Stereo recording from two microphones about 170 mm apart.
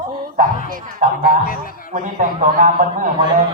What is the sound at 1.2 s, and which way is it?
Speech, 60° left (ahead or behind).